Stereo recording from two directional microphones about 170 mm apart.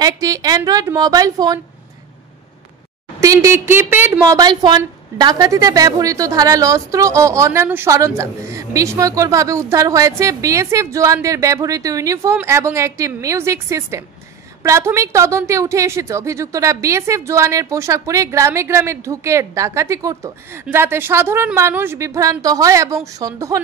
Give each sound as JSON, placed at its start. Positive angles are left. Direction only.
{"t": 0.0, "sound": "a woman's voice", "side_deg": -20}
{"t": 3.2, "sound": "a woman's voice", "side_deg": -20}
{"t": 4.4, "sound": "a woman's voice", "side_deg": -25}